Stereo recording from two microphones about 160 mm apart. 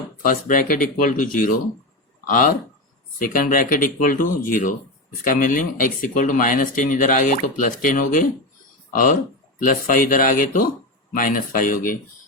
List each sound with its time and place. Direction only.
0.2 s speech: 55° left (ahead or behind)